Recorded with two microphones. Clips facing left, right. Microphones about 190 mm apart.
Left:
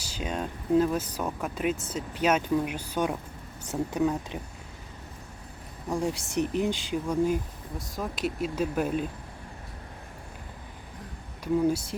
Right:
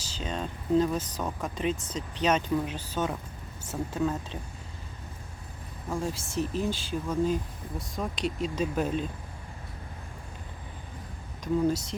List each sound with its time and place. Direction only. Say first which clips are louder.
0.0 s speech: left 2 dB; 10° left (ahead or behind)
5.9 s speech: left 3 dB; 15° left (ahead or behind)
7.8 s speech: even; centre (ahead or behind)
11.7 s speech: left 1 dB; 10° left (ahead or behind)